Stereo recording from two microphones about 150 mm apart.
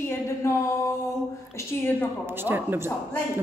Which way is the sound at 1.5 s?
15° left (ahead or behind).